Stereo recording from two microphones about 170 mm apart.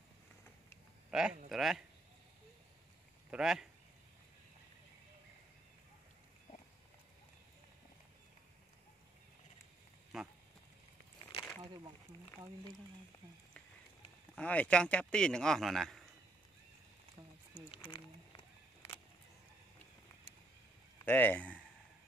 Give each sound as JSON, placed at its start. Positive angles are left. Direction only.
{"t": 1.1, "sound": "a man's voice", "side_deg": 0}
{"t": 3.3, "sound": "speech", "side_deg": -5}
{"t": 10.1, "sound": "speech", "side_deg": 0}
{"t": 11.6, "sound": "a sound", "side_deg": -25}
{"t": 14.3, "sound": "a man's voice", "side_deg": 10}
{"t": 21.0, "sound": "speech", "side_deg": 10}